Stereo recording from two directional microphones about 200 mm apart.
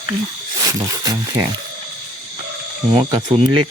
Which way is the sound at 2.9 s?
25° right (ahead or behind).